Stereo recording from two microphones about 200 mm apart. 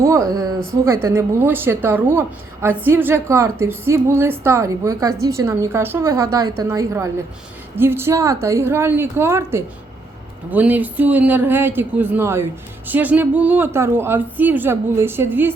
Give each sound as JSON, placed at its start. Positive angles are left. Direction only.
{"t": 0.0, "sound": "a woman's voice", "side_deg": -15}